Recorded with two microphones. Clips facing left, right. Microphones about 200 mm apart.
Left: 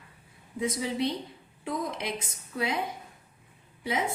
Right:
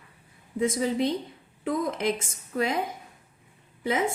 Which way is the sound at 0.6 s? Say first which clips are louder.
Right 4 dB; 50° right (ahead or behind).